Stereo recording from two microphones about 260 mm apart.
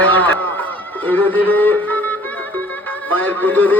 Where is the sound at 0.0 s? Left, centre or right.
Centre.